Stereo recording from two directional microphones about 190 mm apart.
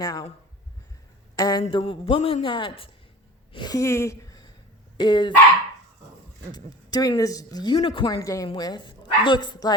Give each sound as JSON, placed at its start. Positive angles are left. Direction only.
{"t": 0.0, "sound": "speech", "side_deg": 20}
{"t": 1.4, "sound": "a woman's voice", "side_deg": 20}
{"t": 6.5, "sound": "speech", "side_deg": 20}